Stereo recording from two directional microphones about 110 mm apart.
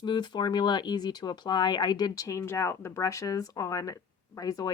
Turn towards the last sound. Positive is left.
turn(degrees=35)  # may be behind; listen again after turning